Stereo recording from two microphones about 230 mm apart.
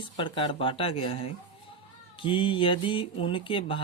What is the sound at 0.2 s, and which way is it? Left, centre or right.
Speech, left.